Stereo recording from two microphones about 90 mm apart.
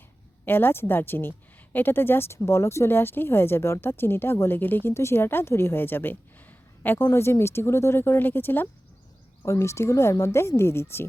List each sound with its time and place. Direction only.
0.4 s speech: 25° left (ahead or behind)